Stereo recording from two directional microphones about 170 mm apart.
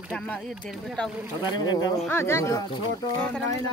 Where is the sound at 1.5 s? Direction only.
25° left (ahead or behind).